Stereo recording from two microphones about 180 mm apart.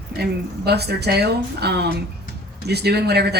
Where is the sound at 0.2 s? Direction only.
65° right (ahead or behind).